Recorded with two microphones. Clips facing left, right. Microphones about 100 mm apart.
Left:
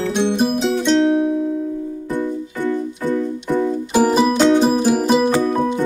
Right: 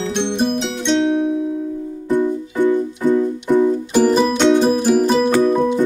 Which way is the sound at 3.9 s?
10° left (ahead or behind).